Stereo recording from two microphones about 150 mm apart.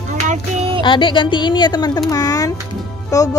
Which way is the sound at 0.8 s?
35° left (ahead or behind).